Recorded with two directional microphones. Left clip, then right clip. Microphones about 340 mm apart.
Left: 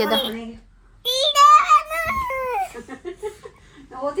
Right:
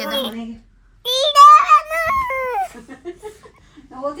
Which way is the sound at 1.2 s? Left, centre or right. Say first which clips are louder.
Right 5 dB; centre.